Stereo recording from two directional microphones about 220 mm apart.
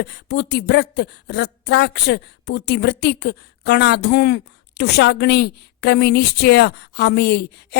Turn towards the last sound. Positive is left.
turn(degrees=50)  # may be behind; listen again after turning